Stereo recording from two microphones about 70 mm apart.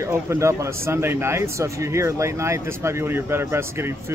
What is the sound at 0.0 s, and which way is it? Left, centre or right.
Speech, right.